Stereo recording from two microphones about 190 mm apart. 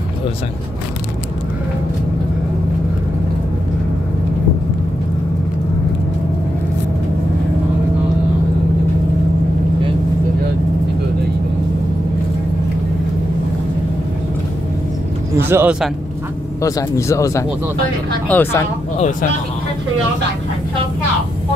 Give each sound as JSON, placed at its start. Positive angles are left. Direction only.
{"t": 15.3, "sound": "speech", "side_deg": -10}
{"t": 16.6, "sound": "speech", "side_deg": 15}